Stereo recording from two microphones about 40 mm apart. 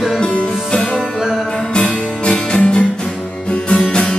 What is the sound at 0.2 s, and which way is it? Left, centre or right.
Music, left.